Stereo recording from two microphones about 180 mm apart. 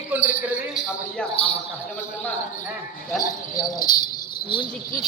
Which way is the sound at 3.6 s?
20° left (ahead or behind).